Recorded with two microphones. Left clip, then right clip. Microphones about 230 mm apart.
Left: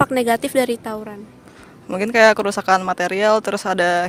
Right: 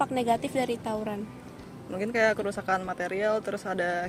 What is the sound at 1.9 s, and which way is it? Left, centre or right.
A woman's voice, left.